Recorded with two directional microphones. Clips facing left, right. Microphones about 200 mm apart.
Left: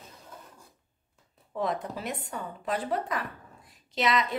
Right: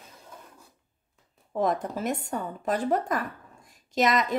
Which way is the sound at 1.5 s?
45° right (ahead or behind).